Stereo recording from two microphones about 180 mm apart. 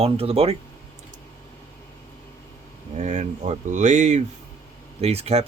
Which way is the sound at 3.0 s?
40° right (ahead or behind).